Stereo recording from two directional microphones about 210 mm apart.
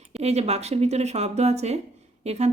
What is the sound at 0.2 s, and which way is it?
Speech, 30° right (ahead or behind).